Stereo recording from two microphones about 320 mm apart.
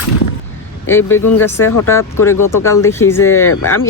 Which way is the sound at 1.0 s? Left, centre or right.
Left.